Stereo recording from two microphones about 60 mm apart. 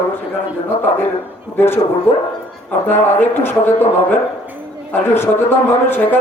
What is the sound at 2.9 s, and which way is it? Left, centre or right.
Speech, left.